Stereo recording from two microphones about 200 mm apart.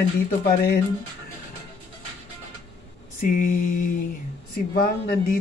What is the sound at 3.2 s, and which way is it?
Mantra, 45° left (ahead or behind).